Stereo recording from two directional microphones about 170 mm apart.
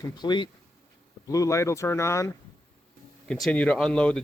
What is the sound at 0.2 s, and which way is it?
Speech, 25° left (ahead or behind).